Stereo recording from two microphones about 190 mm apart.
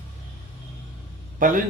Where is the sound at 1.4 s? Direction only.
45° right (ahead or behind).